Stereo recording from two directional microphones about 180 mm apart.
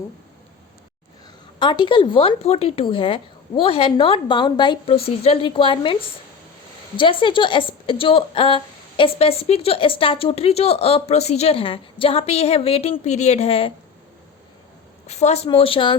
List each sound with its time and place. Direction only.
1.5 s a woman's voice: 25° left (ahead or behind)
15.0 s a woman's voice: 35° left (ahead or behind)